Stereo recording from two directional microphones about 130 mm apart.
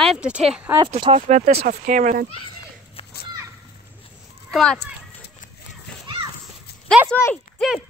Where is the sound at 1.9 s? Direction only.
90° right.